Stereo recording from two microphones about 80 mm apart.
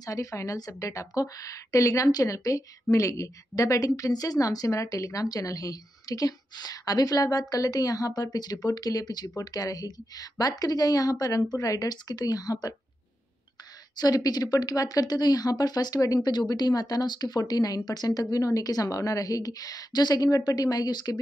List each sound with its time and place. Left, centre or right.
0.0 s a woman's voice: left
13.9 s a woman's voice: left